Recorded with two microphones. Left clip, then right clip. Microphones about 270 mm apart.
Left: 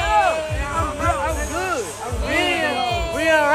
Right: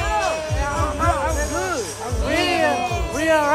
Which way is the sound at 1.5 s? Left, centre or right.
Centre.